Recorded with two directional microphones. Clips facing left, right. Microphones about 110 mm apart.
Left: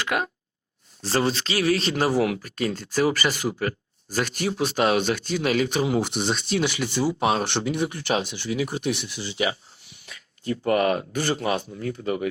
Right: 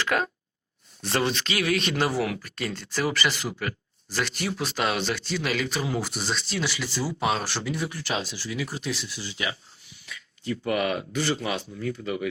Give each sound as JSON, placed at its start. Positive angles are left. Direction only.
{"t": 0.0, "sound": "speech", "side_deg": 20}
{"t": 1.0, "sound": "speech", "side_deg": 30}
{"t": 7.2, "sound": "speech", "side_deg": 45}
{"t": 7.4, "sound": "speech", "side_deg": 20}
{"t": 8.1, "sound": "speech", "side_deg": 55}
{"t": 10.1, "sound": "speech", "side_deg": 40}